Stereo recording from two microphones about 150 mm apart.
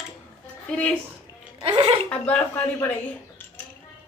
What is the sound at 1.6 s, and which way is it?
Speech, 40° right (ahead or behind).